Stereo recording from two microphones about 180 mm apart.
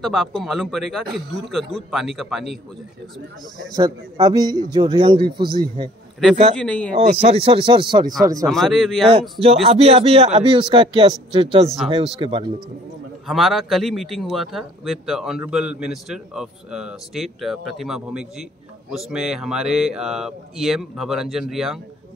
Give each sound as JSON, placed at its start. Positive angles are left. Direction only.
{"t": 0.0, "sound": "a man's voice", "side_deg": 0}
{"t": 3.7, "sound": "a man's voice", "side_deg": -20}
{"t": 6.6, "sound": "a man's voice", "side_deg": 5}
{"t": 7.0, "sound": "a man's voice", "side_deg": -35}
{"t": 8.5, "sound": "a man's voice", "side_deg": 0}
{"t": 9.4, "sound": "a man's voice", "side_deg": -35}
{"t": 13.3, "sound": "a man's voice", "side_deg": 0}